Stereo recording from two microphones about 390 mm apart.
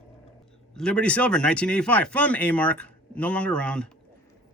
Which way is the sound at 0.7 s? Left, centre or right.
Centre.